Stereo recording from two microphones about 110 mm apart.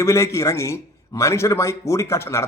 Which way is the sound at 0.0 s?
25° left (ahead or behind).